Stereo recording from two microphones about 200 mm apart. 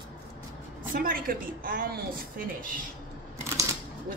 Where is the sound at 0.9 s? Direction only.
45° right (ahead or behind).